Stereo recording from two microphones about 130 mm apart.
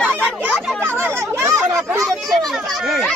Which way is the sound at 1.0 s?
20° right (ahead or behind).